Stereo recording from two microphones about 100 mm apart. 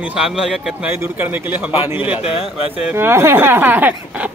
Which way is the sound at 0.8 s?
20° right (ahead or behind).